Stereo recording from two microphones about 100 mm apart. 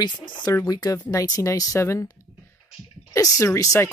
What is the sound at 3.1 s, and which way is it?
Speech, 35° left (ahead or behind).